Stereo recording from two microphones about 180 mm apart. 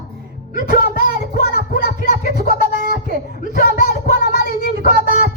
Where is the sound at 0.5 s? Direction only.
50° left (ahead or behind).